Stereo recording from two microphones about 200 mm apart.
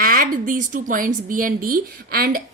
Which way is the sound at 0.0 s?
45° right (ahead or behind).